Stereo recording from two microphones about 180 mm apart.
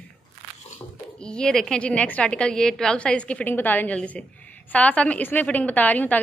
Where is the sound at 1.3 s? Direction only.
5° left (ahead or behind).